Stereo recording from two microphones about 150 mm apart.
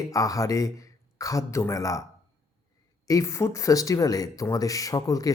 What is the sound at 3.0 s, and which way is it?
A man's voice, 20° left (ahead or behind).